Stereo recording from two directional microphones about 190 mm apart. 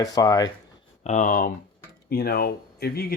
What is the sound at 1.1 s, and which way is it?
Speech, 40° left (ahead or behind).